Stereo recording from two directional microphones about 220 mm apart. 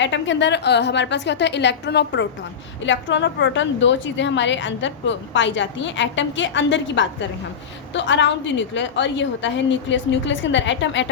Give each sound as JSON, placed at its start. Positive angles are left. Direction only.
{"t": 0.0, "sound": "a woman's voice", "side_deg": 55}